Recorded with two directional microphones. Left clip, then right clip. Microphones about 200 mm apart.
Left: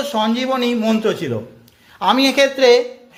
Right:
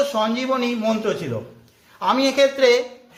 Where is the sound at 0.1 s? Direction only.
40° left (ahead or behind).